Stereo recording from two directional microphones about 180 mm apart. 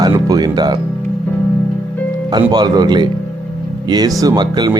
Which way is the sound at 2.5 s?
20° right (ahead or behind).